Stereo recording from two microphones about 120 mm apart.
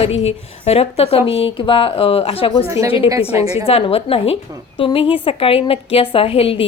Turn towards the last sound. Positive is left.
turn(degrees=50)  # may be behind; listen again after turning